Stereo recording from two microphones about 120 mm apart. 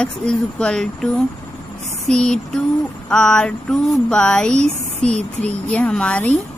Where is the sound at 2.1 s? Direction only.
5° left (ahead or behind).